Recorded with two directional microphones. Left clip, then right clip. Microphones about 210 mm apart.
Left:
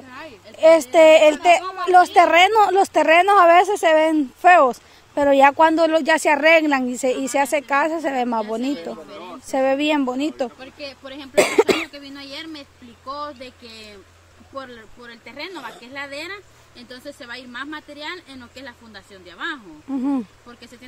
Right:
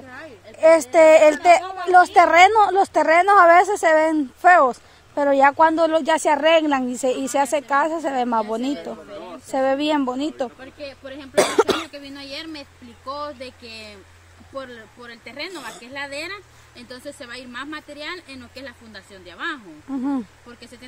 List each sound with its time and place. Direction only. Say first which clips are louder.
0.6 s a woman's voice: left 1 dB; 10° left (ahead or behind)
10.6 s speech: left 1 dB; 40° left (ahead or behind)
11.3 s speech: left 2 dB; 10° left (ahead or behind)
19.9 s a woman's voice: left 2 dB; 10° left (ahead or behind)